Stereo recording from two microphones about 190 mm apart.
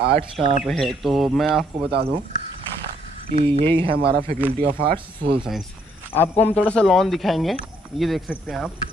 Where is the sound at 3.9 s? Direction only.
55° right (ahead or behind).